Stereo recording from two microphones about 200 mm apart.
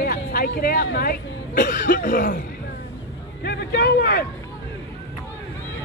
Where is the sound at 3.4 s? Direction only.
55° left (ahead or behind).